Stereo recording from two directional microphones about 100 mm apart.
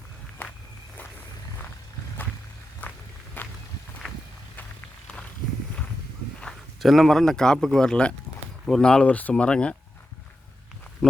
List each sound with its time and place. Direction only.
2.8 s walk: 20° left (ahead or behind)
4.0 s walk: centre (ahead or behind)
6.4 s speech: centre (ahead or behind)
11.0 s speech: 5° left (ahead or behind)